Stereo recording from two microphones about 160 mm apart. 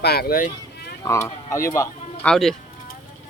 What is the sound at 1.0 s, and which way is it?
Speech, 20° left (ahead or behind).